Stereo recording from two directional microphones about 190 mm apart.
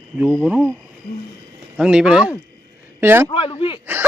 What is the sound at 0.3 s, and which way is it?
Speech, 5° right (ahead or behind).